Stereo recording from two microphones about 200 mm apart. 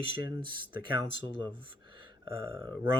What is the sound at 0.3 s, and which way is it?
Speech, 25° right (ahead or behind).